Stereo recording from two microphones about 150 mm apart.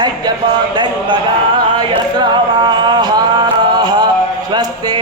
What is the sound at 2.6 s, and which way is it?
Music, 30° right (ahead or behind).